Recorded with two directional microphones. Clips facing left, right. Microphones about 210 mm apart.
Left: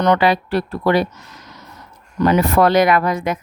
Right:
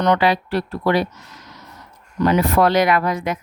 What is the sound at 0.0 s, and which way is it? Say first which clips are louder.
Speech: left 2 dB; 50° left (ahead or behind).